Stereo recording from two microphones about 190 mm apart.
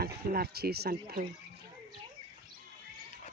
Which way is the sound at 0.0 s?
55° right (ahead or behind).